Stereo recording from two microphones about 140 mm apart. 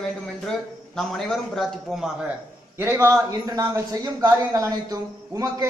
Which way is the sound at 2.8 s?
15° right (ahead or behind).